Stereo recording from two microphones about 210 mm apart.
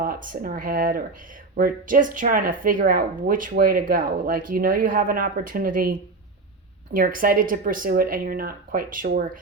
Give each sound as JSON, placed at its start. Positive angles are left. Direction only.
{"t": 0.0, "sound": "speech", "side_deg": -40}